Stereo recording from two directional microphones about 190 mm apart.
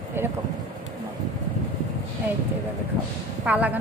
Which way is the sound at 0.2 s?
10° right (ahead or behind).